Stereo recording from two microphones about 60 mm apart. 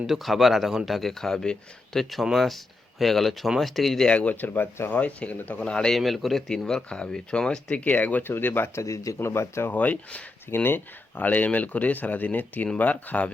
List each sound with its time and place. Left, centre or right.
0.1 s speech: centre
4.1 s speech: left
5.6 s speech: centre
5.9 s speech: centre
6.7 s speech: centre
7.8 s speech: left
8.8 s speech: left
9.2 s speech: left
9.8 s speech: left
10.5 s speech: left